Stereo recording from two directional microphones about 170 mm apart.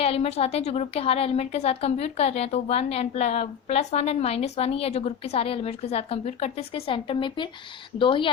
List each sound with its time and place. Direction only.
0.0 s a woman's voice: 35° left (ahead or behind)